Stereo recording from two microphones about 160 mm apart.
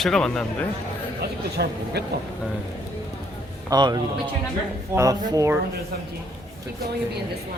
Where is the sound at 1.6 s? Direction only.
90° right.